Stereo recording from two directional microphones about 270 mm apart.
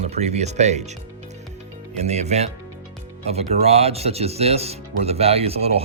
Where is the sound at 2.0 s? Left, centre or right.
Right.